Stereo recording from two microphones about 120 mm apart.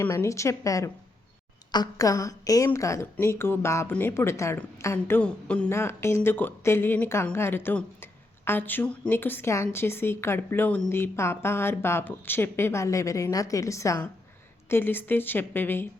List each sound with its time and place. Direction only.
0.0 s a woman's voice: 25° left (ahead or behind)
5.7 s a woman's voice: 20° left (ahead or behind)